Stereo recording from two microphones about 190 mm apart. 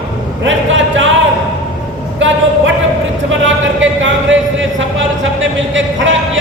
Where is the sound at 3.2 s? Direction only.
85° right.